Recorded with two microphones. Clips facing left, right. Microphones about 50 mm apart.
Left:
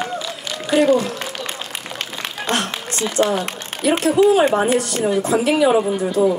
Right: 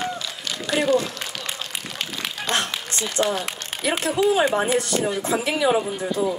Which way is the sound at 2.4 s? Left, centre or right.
Left.